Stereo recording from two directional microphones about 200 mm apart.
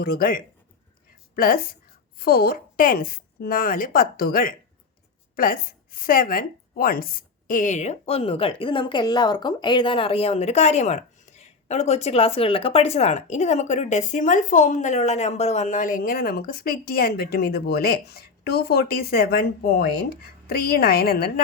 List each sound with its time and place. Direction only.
0.0 s a woman's voice: 50° left (ahead or behind)